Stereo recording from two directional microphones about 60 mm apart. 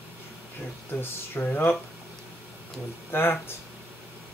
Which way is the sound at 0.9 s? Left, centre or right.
Left.